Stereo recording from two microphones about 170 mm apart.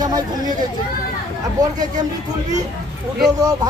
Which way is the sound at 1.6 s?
20° right (ahead or behind).